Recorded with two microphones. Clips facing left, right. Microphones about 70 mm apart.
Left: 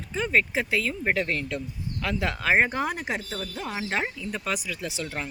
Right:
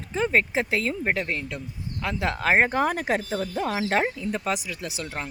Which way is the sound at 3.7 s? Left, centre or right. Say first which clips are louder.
Right 4 dB; right.